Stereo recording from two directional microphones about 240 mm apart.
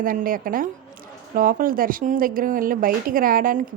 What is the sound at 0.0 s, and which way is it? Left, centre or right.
Speech, right.